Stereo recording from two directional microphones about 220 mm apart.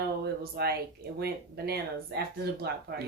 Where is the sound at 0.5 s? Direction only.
45° right (ahead or behind).